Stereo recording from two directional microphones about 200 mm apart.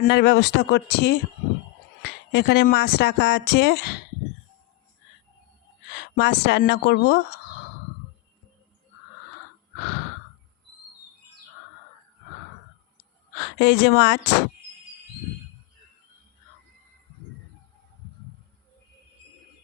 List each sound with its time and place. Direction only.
0.0 s speech: 55° left (ahead or behind)
5.9 s speech: 55° left (ahead or behind)
13.6 s speech: 55° left (ahead or behind)